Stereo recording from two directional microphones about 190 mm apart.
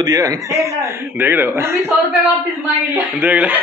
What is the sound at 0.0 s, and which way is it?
Speech, 20° right (ahead or behind).